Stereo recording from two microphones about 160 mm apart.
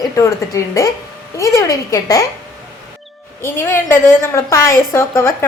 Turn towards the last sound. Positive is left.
turn(degrees=15)  # may be behind; listen again after turning